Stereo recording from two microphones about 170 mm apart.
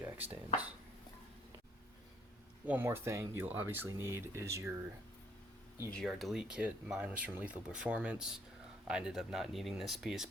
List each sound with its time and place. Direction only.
0.0 s a sound: 10° right (ahead or behind)
2.6 s speech: 15° right (ahead or behind)
5.9 s speech: centre (ahead or behind)